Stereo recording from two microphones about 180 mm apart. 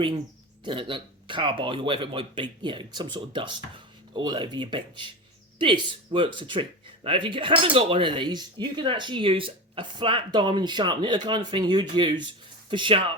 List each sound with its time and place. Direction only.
0.6 s speech: 30° right (ahead or behind)